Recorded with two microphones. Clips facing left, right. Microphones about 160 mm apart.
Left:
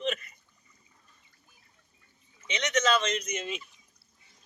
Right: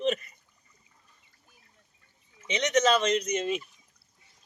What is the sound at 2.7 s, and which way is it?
Speech, 35° right (ahead or behind).